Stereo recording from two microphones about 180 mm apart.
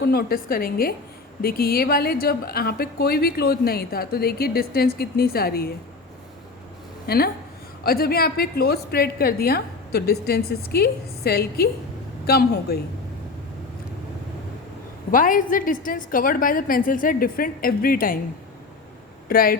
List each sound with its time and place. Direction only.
0.0 s a woman's voice: 60° left (ahead or behind)
7.1 s a woman's voice: 60° left (ahead or behind)
15.1 s a woman's voice: 50° left (ahead or behind)
19.3 s a woman's voice: 55° left (ahead or behind)